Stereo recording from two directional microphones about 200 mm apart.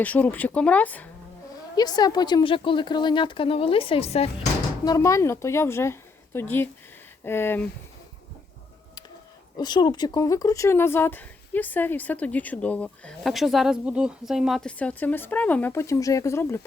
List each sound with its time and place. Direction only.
0.0 s speech: 10° left (ahead or behind)
1.7 s a woman's voice: 20° left (ahead or behind)
4.9 s speech: 15° left (ahead or behind)
9.6 s speech: 20° left (ahead or behind)